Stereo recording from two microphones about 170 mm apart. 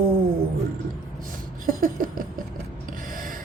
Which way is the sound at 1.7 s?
55° right (ahead or behind).